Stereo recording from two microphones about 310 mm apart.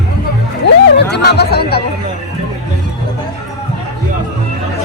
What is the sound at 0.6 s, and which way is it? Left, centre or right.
Speech, left.